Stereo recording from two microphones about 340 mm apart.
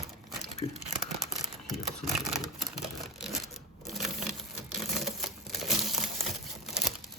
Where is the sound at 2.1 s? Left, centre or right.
Centre.